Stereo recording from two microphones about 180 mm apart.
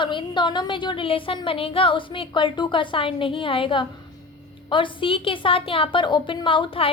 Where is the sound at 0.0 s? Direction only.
25° left (ahead or behind).